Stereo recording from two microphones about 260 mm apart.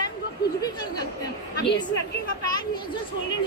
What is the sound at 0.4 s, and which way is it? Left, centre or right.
Chatter, left.